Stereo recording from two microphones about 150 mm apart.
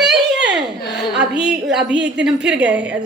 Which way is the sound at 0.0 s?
5° right (ahead or behind).